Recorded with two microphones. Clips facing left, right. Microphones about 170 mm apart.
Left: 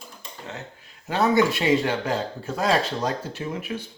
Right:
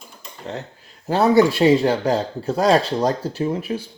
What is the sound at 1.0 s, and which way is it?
Speech, 35° right (ahead or behind).